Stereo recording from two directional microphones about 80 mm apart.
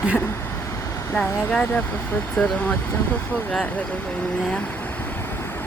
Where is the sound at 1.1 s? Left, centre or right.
Centre.